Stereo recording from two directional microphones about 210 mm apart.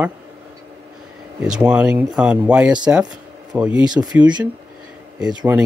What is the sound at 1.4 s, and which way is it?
Speech, 5° right (ahead or behind).